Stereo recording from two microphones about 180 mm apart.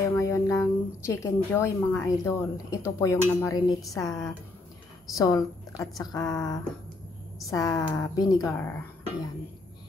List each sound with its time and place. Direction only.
0.1 s a woman's voice: 15° left (ahead or behind)